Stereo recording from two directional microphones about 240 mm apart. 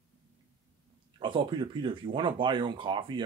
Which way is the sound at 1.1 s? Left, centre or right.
Right.